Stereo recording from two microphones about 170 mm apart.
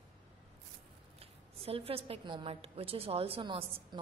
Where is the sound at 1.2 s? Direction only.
35° right (ahead or behind).